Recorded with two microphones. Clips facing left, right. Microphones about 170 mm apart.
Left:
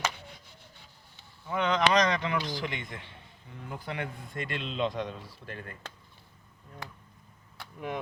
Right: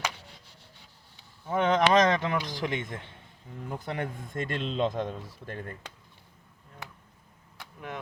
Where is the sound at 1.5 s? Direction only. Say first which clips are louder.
Right 3 dB; 50° right (ahead or behind).